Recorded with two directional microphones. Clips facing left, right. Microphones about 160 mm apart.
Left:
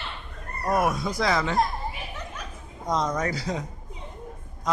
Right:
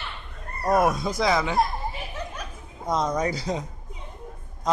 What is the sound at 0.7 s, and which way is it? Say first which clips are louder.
Speech: right 3 dB; 25° right (ahead or behind).